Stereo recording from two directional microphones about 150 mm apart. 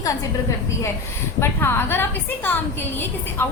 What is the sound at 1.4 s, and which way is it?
A woman's voice, 15° left (ahead or behind).